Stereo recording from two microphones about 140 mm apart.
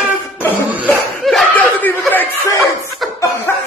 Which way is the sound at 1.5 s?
15° left (ahead or behind).